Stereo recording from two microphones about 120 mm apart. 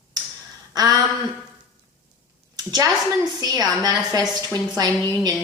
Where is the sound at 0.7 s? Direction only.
35° right (ahead or behind).